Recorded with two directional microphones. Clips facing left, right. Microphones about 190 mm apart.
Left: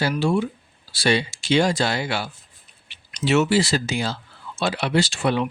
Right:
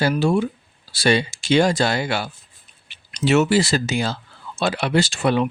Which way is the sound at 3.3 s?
50° right (ahead or behind).